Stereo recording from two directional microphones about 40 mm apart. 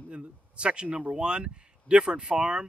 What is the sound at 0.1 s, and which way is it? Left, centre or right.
Speech, right.